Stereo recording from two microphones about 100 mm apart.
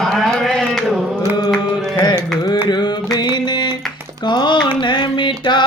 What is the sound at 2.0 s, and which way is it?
Carnatic music, 50° left (ahead or behind).